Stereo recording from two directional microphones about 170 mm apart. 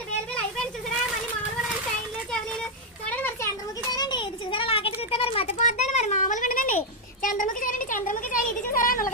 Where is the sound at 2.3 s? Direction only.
5° left (ahead or behind).